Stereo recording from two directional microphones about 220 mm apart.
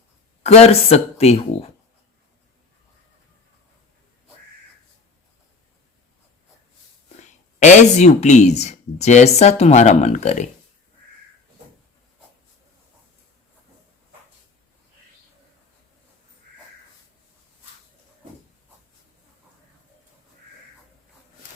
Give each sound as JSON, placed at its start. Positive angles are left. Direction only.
{"t": 0.4, "sound": "speech", "side_deg": 30}
{"t": 7.2, "sound": "speech", "side_deg": 35}